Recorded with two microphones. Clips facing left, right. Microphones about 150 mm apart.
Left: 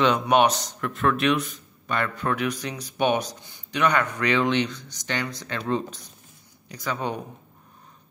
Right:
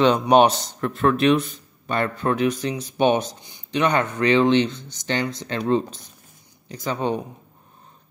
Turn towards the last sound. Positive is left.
turn(degrees=-30)  # may be behind; listen again after turning